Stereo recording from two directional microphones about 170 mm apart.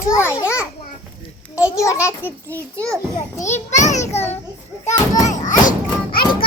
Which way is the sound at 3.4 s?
45° left (ahead or behind).